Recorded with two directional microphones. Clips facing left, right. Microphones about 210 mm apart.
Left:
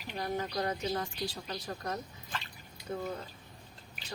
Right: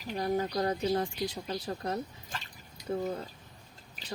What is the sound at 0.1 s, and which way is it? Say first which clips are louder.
Speech: right 5 dB; 35° right (ahead or behind).